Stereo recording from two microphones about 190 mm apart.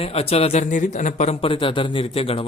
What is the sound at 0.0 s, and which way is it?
A man's voice, 30° left (ahead or behind).